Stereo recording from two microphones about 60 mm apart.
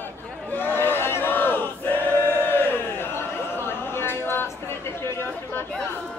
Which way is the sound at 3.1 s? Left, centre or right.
Left.